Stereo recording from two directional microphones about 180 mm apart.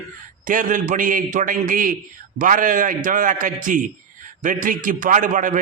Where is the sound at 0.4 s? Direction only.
45° right (ahead or behind).